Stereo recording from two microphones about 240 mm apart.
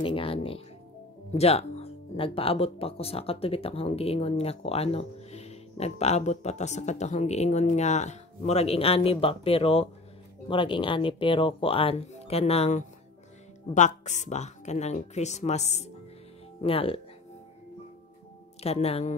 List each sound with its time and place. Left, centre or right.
0.0 s speech: left
18.6 s speech: left